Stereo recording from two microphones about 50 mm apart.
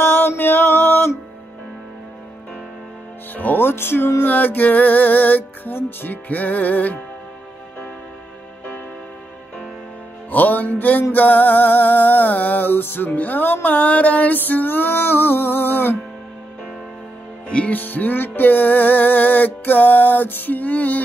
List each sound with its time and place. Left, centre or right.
0.0 s music: left
3.3 s music: left
4.2 s music: left
10.3 s music: left
17.5 s music: left
17.7 s music: left